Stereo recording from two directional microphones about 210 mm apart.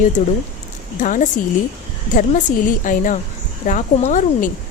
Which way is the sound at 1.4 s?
45° left (ahead or behind).